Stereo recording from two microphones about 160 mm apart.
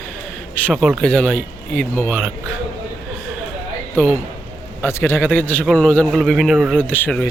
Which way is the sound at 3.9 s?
10° left (ahead or behind).